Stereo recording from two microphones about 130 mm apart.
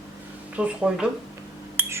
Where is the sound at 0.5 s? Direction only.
10° right (ahead or behind).